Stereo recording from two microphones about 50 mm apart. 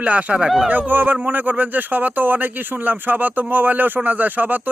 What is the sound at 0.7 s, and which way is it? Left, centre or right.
Speech, right.